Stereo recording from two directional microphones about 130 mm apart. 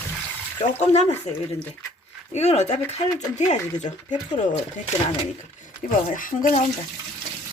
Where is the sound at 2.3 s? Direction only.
55° left (ahead or behind).